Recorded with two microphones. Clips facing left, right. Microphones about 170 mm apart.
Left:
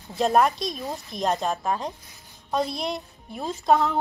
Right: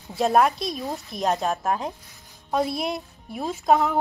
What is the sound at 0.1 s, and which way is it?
A woman's voice, 5° right (ahead or behind).